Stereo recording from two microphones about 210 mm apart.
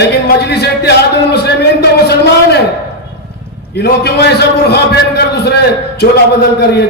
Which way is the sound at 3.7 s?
50° left (ahead or behind).